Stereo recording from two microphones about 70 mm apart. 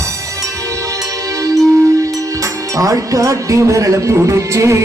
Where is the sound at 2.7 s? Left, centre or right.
Right.